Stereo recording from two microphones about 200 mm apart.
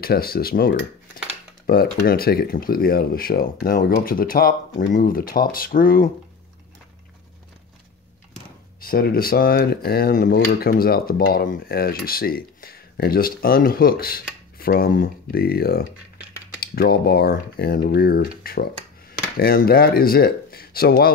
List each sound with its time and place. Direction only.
0.0 s speech: 50° left (ahead or behind)
8.8 s speech: 50° left (ahead or behind)